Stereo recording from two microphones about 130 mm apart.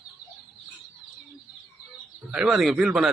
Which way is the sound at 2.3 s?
5° right (ahead or behind).